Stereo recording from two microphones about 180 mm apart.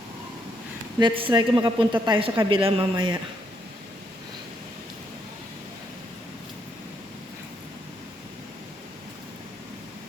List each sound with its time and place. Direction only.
0.9 s speech: 30° right (ahead or behind)